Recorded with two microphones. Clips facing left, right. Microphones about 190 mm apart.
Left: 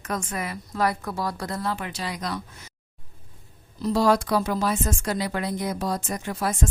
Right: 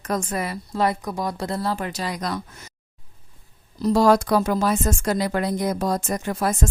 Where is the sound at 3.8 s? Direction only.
45° right (ahead or behind).